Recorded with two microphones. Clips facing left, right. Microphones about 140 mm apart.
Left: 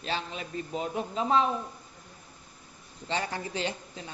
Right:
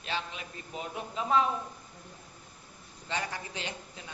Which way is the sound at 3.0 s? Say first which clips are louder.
Left 4 dB; 30° left (ahead or behind).